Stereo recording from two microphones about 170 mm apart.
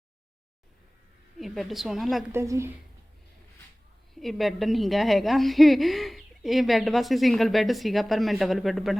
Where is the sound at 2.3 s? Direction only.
15° right (ahead or behind).